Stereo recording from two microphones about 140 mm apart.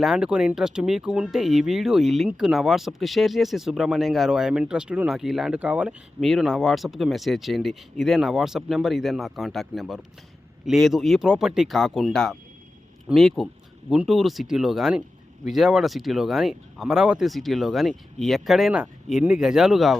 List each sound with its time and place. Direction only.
0.0 s speech: 5° right (ahead or behind)